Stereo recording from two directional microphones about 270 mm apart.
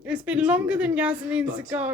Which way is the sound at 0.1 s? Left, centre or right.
Centre.